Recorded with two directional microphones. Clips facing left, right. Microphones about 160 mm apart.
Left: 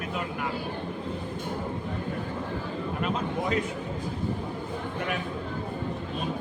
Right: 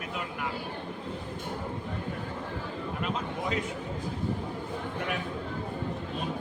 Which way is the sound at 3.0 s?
45° left (ahead or behind).